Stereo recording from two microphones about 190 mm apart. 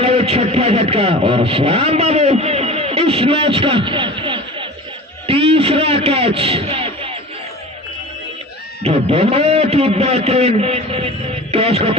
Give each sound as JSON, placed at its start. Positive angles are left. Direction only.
{"t": 0.0, "sound": "radio", "side_deg": -30}
{"t": 5.2, "sound": "a sound", "side_deg": -30}
{"t": 8.8, "sound": "a man's voice", "side_deg": -35}